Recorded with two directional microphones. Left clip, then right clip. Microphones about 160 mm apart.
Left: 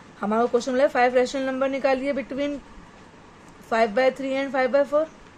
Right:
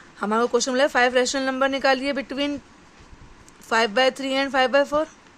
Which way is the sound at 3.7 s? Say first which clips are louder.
Right 1 dB; 40° right (ahead or behind).